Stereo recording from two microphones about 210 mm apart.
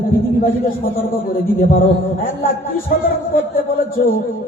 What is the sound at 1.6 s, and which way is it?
Mantra, 40° left (ahead or behind).